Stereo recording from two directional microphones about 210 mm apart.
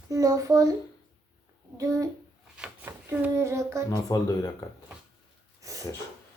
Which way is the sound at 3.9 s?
20° left (ahead or behind).